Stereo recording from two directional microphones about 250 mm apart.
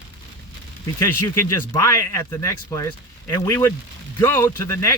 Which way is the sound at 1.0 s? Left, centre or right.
Centre.